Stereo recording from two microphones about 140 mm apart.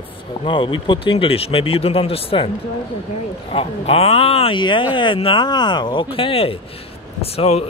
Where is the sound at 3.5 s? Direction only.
45° left (ahead or behind).